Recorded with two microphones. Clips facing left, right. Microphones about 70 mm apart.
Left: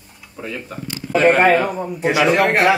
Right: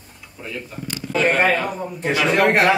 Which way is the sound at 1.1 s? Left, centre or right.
Left.